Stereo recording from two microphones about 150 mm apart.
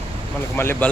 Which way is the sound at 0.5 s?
15° left (ahead or behind).